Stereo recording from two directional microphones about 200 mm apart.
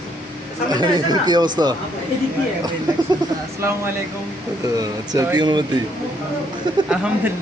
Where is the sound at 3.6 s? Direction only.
10° right (ahead or behind).